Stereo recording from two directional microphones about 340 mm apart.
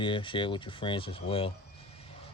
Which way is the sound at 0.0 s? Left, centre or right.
Centre.